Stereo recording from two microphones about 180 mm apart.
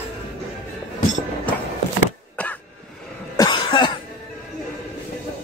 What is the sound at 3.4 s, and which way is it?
Cough, 25° left (ahead or behind).